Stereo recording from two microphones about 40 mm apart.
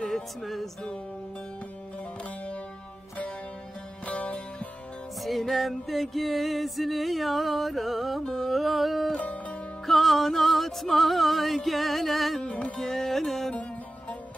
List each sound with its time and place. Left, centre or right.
0.0 s music: centre
4.0 s music: left
5.2 s music: centre
8.3 s a sound: centre
9.1 s music: left
9.8 s music: centre
12.4 s music: left
12.9 s music: centre